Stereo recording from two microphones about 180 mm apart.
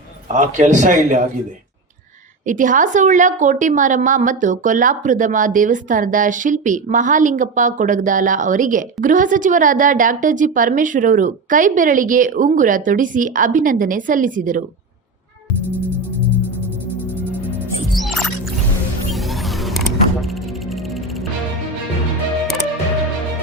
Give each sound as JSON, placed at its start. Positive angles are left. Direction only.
{"t": 0.3, "sound": "a woman's voice", "side_deg": -45}
{"t": 2.5, "sound": "a woman's voice", "side_deg": -45}
{"t": 17.9, "sound": "music", "side_deg": 0}